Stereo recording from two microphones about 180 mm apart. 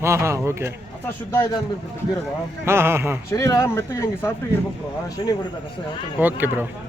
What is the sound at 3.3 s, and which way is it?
Speech, 15° left (ahead or behind).